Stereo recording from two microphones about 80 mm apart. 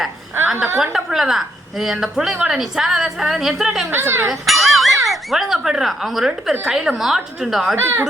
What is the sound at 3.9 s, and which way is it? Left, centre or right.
Speech, right.